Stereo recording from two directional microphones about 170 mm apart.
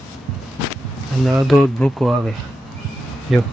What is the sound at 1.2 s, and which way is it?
Speech, centre (ahead or behind).